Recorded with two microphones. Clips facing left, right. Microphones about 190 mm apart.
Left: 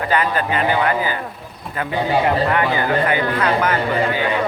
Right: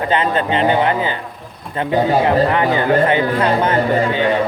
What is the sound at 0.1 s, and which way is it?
Speech, 25° right (ahead or behind).